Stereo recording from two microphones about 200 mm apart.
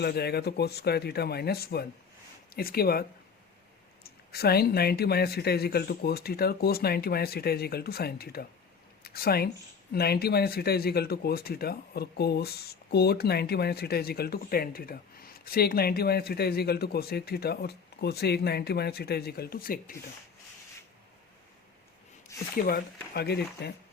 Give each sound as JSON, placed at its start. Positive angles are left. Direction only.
{"t": 0.0, "sound": "speech", "side_deg": 55}
{"t": 22.5, "sound": "speech", "side_deg": 50}